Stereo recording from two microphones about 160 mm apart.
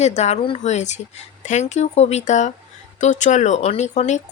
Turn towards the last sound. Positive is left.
turn(degrees=45)  # may be behind; listen again after turning